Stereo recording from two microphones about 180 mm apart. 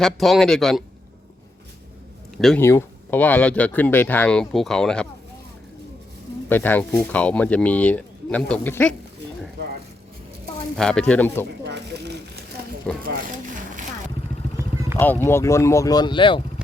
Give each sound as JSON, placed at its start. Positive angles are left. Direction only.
{"t": 0.0, "sound": "speech", "side_deg": 0}
{"t": 2.6, "sound": "speech", "side_deg": 15}
{"t": 6.5, "sound": "speech", "side_deg": 10}
{"t": 10.8, "sound": "speech", "side_deg": 5}
{"t": 11.6, "sound": "a sound", "side_deg": -65}
{"t": 12.9, "sound": "speech", "side_deg": 5}
{"t": 14.9, "sound": "speech", "side_deg": 10}